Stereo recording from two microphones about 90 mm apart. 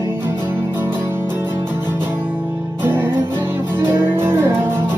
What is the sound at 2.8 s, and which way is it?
Music, 25° right (ahead or behind).